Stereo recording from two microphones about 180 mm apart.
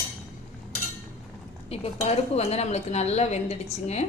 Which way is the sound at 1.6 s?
35° left (ahead or behind).